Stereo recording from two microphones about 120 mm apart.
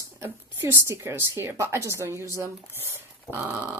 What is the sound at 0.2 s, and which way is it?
Speech, 20° right (ahead or behind).